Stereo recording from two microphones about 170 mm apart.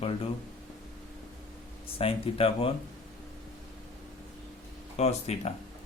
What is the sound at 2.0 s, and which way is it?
Speech, 35° left (ahead or behind).